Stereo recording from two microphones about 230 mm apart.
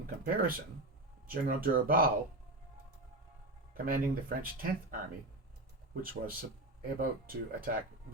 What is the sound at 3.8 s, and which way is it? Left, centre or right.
Speech, right.